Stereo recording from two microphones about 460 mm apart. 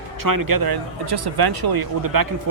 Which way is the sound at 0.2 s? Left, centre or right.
Right.